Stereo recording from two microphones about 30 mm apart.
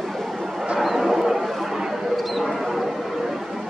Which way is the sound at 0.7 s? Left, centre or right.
Centre.